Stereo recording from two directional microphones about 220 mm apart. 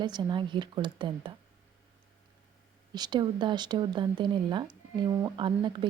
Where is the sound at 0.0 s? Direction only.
20° right (ahead or behind).